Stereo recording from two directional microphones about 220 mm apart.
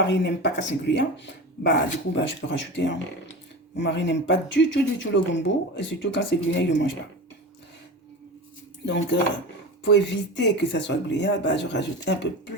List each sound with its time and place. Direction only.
0.0 s speech: 50° left (ahead or behind)
8.9 s speech: 55° left (ahead or behind)